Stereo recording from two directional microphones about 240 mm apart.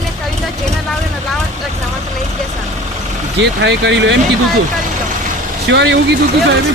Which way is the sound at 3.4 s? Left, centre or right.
Right.